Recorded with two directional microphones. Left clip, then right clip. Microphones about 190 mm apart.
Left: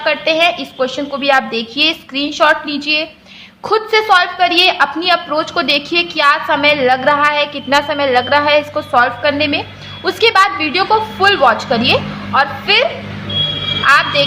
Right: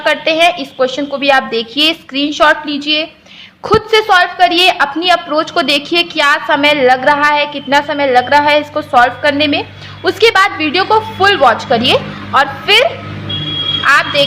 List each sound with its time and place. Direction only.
0.0 s a woman's voice: 20° right (ahead or behind)